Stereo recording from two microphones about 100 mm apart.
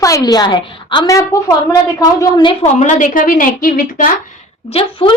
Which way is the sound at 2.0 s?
50° left (ahead or behind).